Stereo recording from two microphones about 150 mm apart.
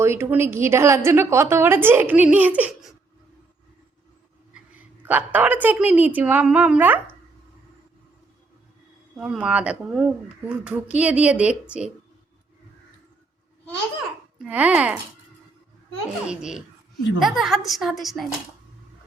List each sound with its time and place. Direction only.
0.0 s a woman's voice: 15° right (ahead or behind)
4.5 s a woman's voice: 10° right (ahead or behind)
9.1 s a woman's voice: 5° right (ahead or behind)
14.3 s a woman's voice: 10° right (ahead or behind)
16.2 s a woman's voice: 5° right (ahead or behind)